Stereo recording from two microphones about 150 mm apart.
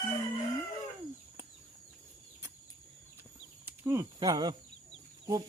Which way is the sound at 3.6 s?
20° right (ahead or behind).